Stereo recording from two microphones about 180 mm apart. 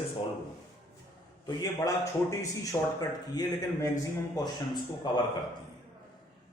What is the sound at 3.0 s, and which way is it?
A man's voice, 20° left (ahead or behind).